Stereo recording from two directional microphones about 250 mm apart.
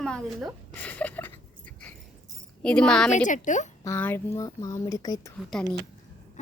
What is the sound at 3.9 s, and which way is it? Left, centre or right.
Speech, centre.